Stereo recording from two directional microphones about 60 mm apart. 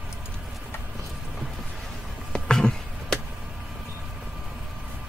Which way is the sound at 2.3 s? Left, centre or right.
Centre.